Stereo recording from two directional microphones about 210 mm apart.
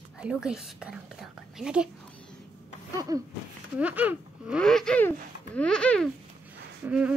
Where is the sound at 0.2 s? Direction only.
5° right (ahead or behind).